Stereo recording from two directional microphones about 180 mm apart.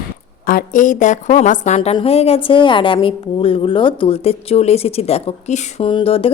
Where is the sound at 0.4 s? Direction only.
50° left (ahead or behind).